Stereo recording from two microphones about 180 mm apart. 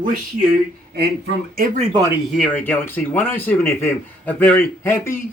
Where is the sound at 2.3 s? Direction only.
5° left (ahead or behind).